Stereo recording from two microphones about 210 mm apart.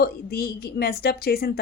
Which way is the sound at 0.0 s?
45° left (ahead or behind).